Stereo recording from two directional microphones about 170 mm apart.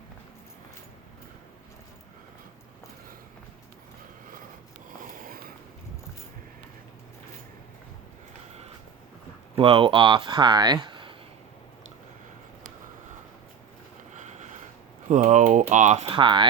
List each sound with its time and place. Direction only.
9.6 s speech: 30° right (ahead or behind)
14.1 s a sound: 45° right (ahead or behind)
15.1 s speech: 50° right (ahead or behind); by 16.5 s 30° right (ahead or behind)